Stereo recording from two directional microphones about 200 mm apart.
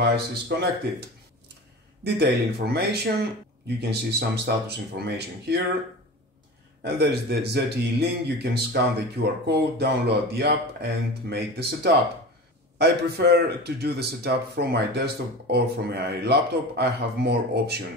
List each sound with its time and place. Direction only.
0.0 s speech: 55° right (ahead or behind)
2.0 s speech: 55° right (ahead or behind)
6.8 s speech: 55° right (ahead or behind)